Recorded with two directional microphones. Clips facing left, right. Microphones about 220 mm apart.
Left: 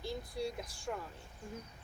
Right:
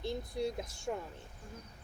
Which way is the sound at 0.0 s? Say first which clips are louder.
Right 3 dB; 20° right (ahead or behind).